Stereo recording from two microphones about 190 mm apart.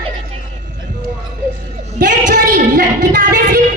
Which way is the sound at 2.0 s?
45° right (ahead or behind).